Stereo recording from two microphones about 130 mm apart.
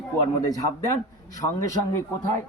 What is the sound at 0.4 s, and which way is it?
Speech, 25° left (ahead or behind).